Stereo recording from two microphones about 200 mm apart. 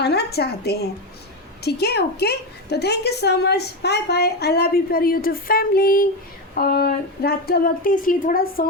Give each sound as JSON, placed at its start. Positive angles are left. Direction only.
{"t": 0.0, "sound": "a woman's voice", "side_deg": 55}